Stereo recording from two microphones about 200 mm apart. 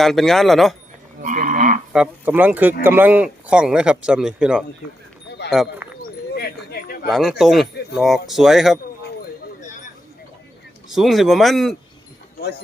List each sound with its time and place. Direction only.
0.0 s speech: centre (ahead or behind)
1.2 s livestock: 40° right (ahead or behind)
1.9 s speech: 5° right (ahead or behind)
6.0 s a sound: 55° left (ahead or behind)
7.1 s speech: centre (ahead or behind)
10.9 s speech: centre (ahead or behind)